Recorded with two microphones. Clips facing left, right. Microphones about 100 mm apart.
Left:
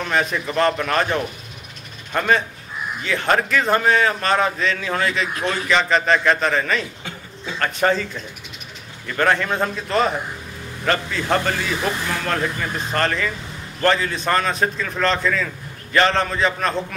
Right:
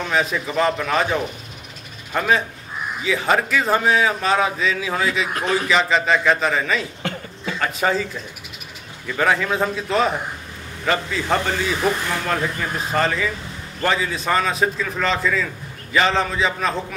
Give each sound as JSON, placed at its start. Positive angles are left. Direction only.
{"t": 0.0, "sound": "speech", "side_deg": -5}
{"t": 7.0, "sound": "a sound", "side_deg": -65}
{"t": 7.5, "sound": "speech", "side_deg": -5}